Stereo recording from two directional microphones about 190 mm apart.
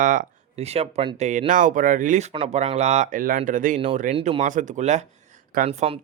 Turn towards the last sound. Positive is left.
turn(degrees=-35)  # may be behind; listen again after turning